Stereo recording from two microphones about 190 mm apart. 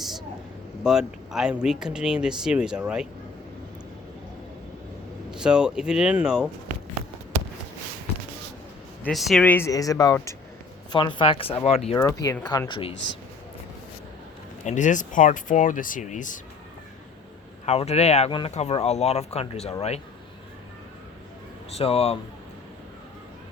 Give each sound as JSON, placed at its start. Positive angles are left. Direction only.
{"t": 0.9, "sound": "speech", "side_deg": 0}
{"t": 5.3, "sound": "speech", "side_deg": -5}
{"t": 9.0, "sound": "speech", "side_deg": 0}
{"t": 11.9, "sound": "speech", "side_deg": 15}
{"t": 14.6, "sound": "speech", "side_deg": 40}
{"t": 17.7, "sound": "speech", "side_deg": 35}
{"t": 21.7, "sound": "speech", "side_deg": 30}